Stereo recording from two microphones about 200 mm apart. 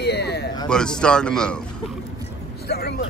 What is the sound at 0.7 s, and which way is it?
Speech, 5° left (ahead or behind).